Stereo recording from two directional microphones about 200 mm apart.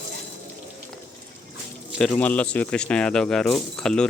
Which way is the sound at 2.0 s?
5° left (ahead or behind).